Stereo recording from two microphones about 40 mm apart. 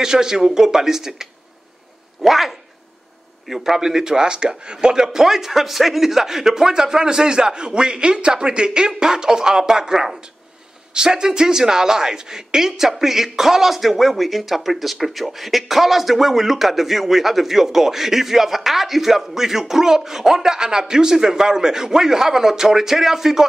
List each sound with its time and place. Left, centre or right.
0.0 s speech: centre
2.2 s speech: centre